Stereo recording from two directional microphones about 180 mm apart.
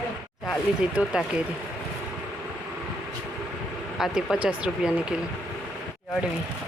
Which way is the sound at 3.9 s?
Centre (ahead or behind).